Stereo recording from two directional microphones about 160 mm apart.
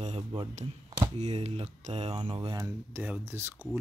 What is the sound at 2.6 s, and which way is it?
Speech, 15° right (ahead or behind).